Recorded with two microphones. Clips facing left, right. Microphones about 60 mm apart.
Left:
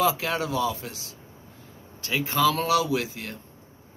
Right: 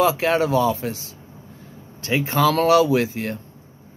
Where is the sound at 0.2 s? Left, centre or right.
Right.